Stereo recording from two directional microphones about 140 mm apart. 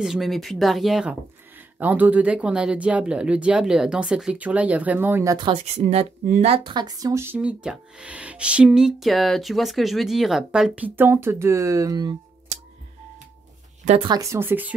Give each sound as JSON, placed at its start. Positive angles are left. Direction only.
{"t": 0.0, "sound": "speech", "side_deg": 0}
{"t": 1.8, "sound": "speech", "side_deg": -10}
{"t": 5.5, "sound": "speech", "side_deg": -50}
{"t": 6.5, "sound": "speech", "side_deg": -35}
{"t": 14.0, "sound": "speech", "side_deg": -25}